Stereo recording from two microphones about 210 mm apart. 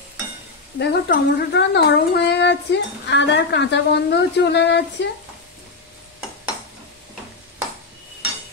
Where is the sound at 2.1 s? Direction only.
55° left (ahead or behind).